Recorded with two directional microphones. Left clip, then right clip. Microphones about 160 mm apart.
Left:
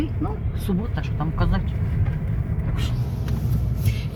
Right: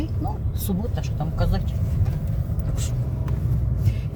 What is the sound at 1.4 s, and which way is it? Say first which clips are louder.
Speech: even; 30° right (ahead or behind).